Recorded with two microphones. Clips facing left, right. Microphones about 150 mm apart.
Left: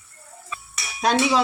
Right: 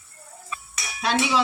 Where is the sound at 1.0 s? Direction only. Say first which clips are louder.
Left 3 dB; 40° left (ahead or behind).